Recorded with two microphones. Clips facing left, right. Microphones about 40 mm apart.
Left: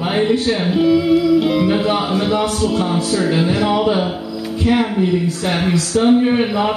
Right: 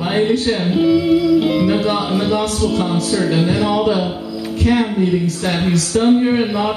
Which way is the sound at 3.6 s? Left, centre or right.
Left.